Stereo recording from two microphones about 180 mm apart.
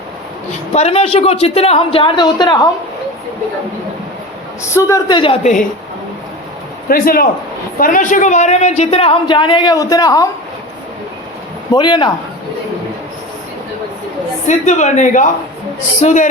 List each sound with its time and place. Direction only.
0.7 s a woman's voice: 35° left (ahead or behind)
4.7 s a woman's voice: 20° left (ahead or behind)
5.4 s a woman's voice: 40° left (ahead or behind)
6.8 s a man's voice: 55° left (ahead or behind); by 10.2 s 20° left (ahead or behind)
11.7 s a woman's voice: 25° left (ahead or behind)
14.4 s speech: 40° left (ahead or behind)